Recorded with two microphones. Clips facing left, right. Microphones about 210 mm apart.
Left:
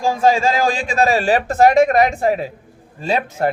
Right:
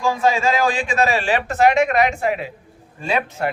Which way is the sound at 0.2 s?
35° left (ahead or behind).